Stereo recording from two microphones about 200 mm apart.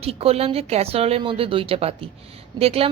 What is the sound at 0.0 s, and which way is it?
Speech, 30° right (ahead or behind).